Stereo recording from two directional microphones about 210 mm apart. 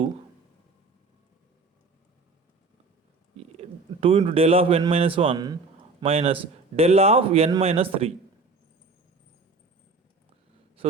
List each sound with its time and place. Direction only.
3.3 s speech: 30° right (ahead or behind)
10.8 s speech: 25° right (ahead or behind)